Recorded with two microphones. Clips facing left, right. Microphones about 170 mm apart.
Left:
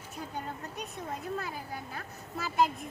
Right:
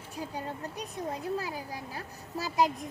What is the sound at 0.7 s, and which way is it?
A child's voice, 35° right (ahead or behind).